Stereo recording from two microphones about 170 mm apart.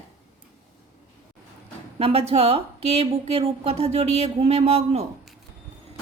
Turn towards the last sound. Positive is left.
turn(degrees=-35)  # may be behind; listen again after turning